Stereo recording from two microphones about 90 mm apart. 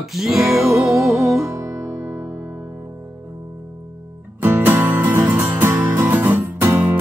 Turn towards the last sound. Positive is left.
turn(degrees=-25)  # may be behind; listen again after turning